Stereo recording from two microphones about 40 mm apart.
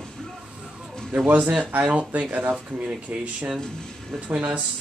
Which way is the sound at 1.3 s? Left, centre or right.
Right.